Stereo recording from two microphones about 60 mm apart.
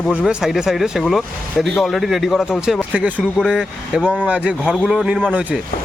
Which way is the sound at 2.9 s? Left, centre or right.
Right.